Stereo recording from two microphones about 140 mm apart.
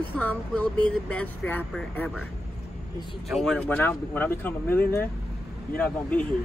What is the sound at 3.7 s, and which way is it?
Speech, 15° left (ahead or behind).